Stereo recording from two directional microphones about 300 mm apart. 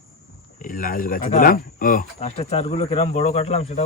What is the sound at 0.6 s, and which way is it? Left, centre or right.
Speech, left.